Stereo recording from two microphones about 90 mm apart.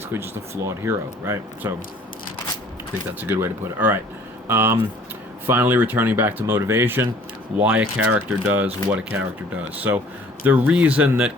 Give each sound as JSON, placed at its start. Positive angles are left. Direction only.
{"t": 0.1, "sound": "speech", "side_deg": -25}
{"t": 3.2, "sound": "speech", "side_deg": -25}
{"t": 10.4, "sound": "speech", "side_deg": -15}